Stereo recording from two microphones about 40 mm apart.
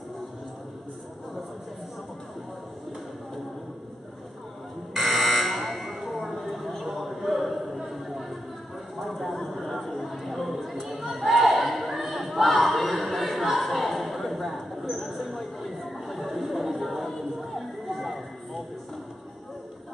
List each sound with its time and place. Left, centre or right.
4.9 s buzzer: centre
9.3 s a sound: centre
16.1 s music: centre